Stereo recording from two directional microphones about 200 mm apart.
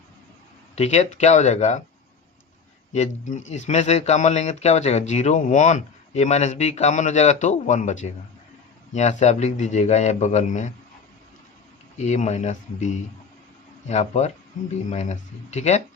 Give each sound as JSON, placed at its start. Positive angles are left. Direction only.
{"t": 0.8, "sound": "speech", "side_deg": 35}
{"t": 2.9, "sound": "speech", "side_deg": 35}
{"t": 11.9, "sound": "speech", "side_deg": 35}